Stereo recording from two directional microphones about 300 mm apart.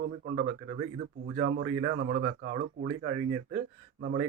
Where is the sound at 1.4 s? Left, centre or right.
Right.